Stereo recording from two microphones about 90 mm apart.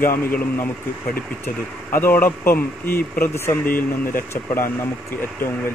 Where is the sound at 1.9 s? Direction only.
25° left (ahead or behind).